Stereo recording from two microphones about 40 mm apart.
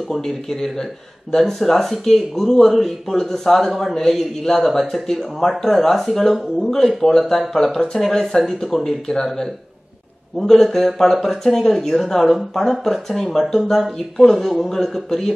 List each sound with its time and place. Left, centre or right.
0.1 s a man's voice: centre